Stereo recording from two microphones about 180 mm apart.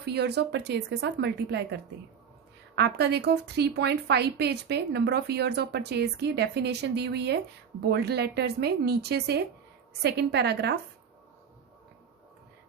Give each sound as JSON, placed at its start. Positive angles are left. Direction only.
{"t": 0.0, "sound": "a woman's voice", "side_deg": -65}